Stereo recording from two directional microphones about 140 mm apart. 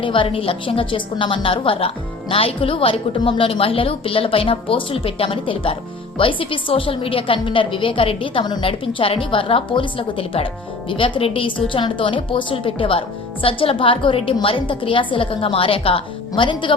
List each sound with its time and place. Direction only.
0.0 s a woman's voice: 40° left (ahead or behind)